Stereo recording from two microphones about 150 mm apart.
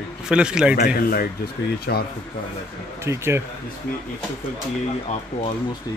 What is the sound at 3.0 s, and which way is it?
Speech, 15° right (ahead or behind).